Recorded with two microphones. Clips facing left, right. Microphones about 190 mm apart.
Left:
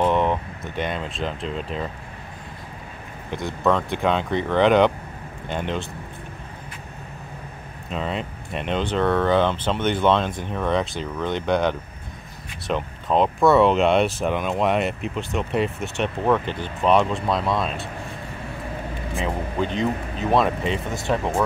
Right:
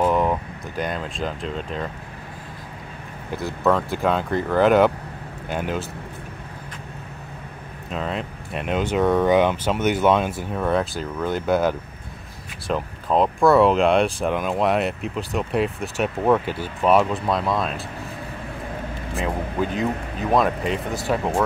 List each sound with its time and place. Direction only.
0.0 s speech: 5° right (ahead or behind)
3.3 s speech: 5° right (ahead or behind)
7.9 s speech: centre (ahead or behind)
19.1 s speech: 5° right (ahead or behind)